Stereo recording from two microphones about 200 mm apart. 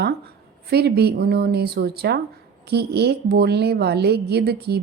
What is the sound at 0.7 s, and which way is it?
A woman's voice, 55° right (ahead or behind).